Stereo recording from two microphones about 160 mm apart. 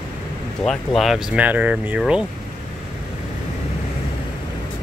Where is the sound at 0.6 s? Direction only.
Centre (ahead or behind).